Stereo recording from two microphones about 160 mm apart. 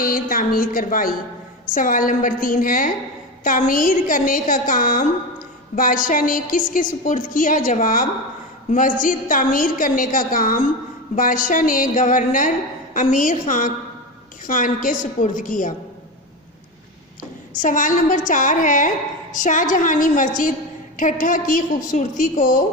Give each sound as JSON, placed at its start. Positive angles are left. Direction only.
{"t": 0.0, "sound": "a woman's voice", "side_deg": 60}
{"t": 17.6, "sound": "a woman's voice", "side_deg": 55}